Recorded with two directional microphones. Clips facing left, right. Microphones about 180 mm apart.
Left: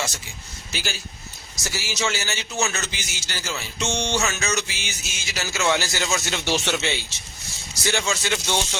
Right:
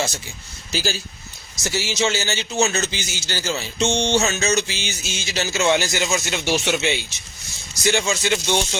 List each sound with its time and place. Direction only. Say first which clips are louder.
0.7 s a man's voice: right 7 dB; 30° right (ahead or behind); by 8.8 s 15° right (ahead or behind)